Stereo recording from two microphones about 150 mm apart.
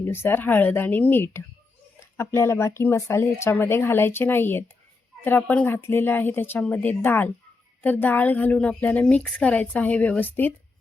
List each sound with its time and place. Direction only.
0.0 s a woman's voice: 15° left (ahead or behind)